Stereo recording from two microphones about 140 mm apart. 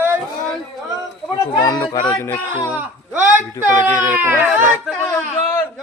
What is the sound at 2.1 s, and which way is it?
Speech, 20° left (ahead or behind).